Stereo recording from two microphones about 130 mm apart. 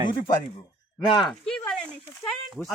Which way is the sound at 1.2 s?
Centre (ahead or behind).